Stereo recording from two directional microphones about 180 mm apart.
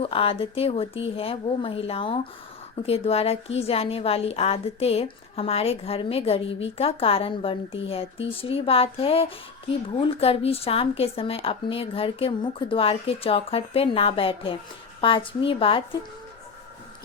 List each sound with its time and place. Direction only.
0.0 s a woman's voice: 30° left (ahead or behind)